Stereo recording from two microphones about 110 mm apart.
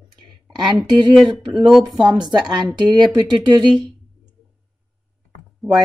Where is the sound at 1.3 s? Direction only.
Centre (ahead or behind).